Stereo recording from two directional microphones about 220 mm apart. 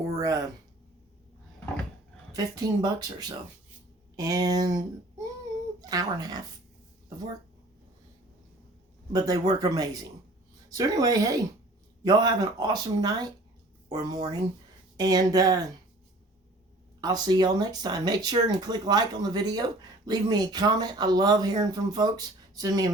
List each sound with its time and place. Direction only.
0.2 s speech: 15° right (ahead or behind)
2.3 s speech: 15° right (ahead or behind)
5.8 s speech: 15° right (ahead or behind)
9.1 s speech: 15° right (ahead or behind)
17.0 s speech: 20° right (ahead or behind)